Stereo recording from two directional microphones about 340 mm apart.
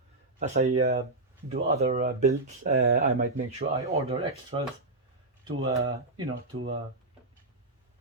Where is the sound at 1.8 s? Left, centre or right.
Centre.